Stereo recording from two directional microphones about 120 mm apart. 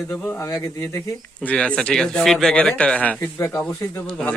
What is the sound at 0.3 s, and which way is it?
Speech, 20° left (ahead or behind).